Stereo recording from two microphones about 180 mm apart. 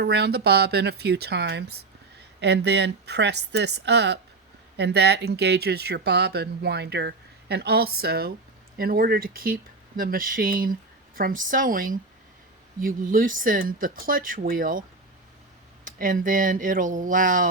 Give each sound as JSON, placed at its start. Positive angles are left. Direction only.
{"t": 0.0, "sound": "speech", "side_deg": -65}